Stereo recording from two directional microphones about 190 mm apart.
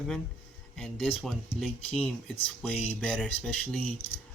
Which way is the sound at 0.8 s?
Centre (ahead or behind).